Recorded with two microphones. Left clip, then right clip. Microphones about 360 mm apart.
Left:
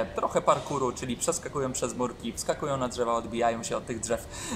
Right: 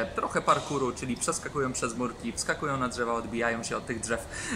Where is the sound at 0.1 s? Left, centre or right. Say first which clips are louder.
Left 1 dB; centre.